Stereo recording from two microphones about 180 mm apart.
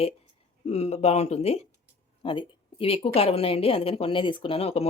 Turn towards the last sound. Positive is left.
turn(degrees=35)  # may be behind; listen again after turning